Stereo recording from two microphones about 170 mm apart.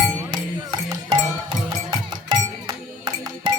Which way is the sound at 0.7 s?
25° right (ahead or behind).